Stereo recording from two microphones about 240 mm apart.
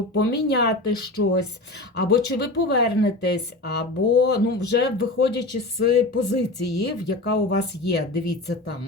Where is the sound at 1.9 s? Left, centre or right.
Left.